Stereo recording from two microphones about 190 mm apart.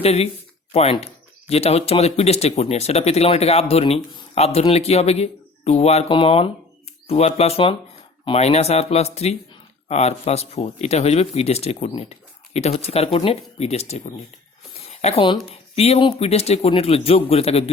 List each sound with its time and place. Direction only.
0.0 s speech: 30° left (ahead or behind)